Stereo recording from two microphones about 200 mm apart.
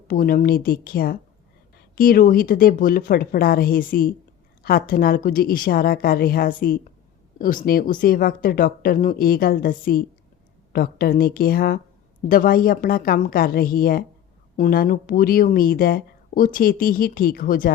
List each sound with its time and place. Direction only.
0.1 s speech: 45° left (ahead or behind)